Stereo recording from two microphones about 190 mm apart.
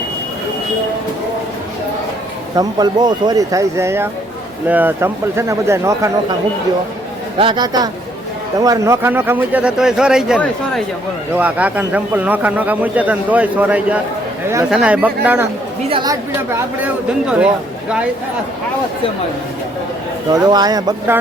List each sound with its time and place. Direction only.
2.6 s a man's voice: 20° right (ahead or behind)
7.3 s a man's voice: 25° right (ahead or behind); by 15.4 s 10° right (ahead or behind)
15.9 s a man's voice: 20° right (ahead or behind); by 17.5 s 5° right (ahead or behind)
20.5 s speech: 20° right (ahead or behind)